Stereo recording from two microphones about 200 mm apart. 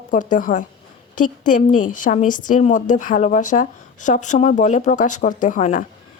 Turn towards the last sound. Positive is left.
turn(degrees=40)  # may be behind; listen again after turning